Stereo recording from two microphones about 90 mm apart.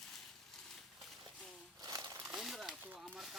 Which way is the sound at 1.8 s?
45° right (ahead or behind).